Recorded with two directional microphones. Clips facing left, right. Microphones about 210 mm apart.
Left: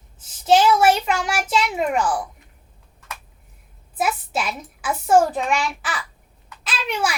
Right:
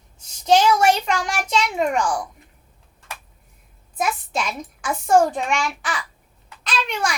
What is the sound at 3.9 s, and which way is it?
A child's voice, 5° left (ahead or behind).